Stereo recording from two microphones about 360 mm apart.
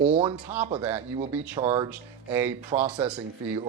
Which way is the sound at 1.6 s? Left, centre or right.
Centre.